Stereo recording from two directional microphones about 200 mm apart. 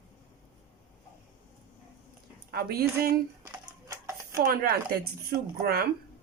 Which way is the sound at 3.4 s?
15° right (ahead or behind).